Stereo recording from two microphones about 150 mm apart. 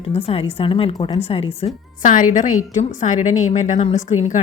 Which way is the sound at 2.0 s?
60° left (ahead or behind).